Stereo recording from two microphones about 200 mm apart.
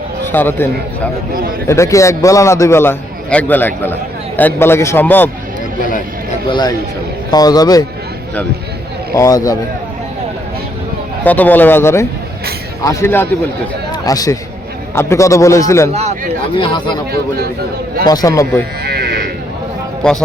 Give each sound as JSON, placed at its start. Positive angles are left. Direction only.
{"t": 0.3, "sound": "a man's voice", "side_deg": 10}
{"t": 6.5, "sound": "a man's voice", "side_deg": 20}
{"t": 9.1, "sound": "a man's voice", "side_deg": 15}
{"t": 11.2, "sound": "a man's voice", "side_deg": 10}
{"t": 15.9, "sound": "speech", "side_deg": -30}
{"t": 16.6, "sound": "a man's voice", "side_deg": 25}
{"t": 18.0, "sound": "a man's voice", "side_deg": 20}
{"t": 18.9, "sound": "sheep", "side_deg": -50}
{"t": 20.0, "sound": "a man's voice", "side_deg": 5}